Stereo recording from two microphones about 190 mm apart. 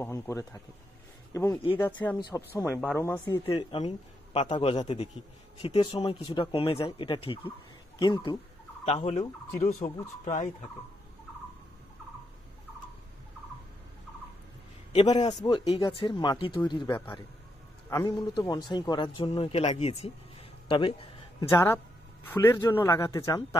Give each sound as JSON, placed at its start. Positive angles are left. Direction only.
{"t": 0.0, "sound": "speech", "side_deg": 15}
{"t": 3.5, "sound": "a man's voice", "side_deg": 30}
{"t": 9.8, "sound": "speech", "side_deg": 15}
{"t": 10.2, "sound": "speech", "side_deg": 45}
{"t": 15.0, "sound": "speech", "side_deg": 25}
{"t": 20.6, "sound": "a sound", "side_deg": 25}
{"t": 21.5, "sound": "speech", "side_deg": 15}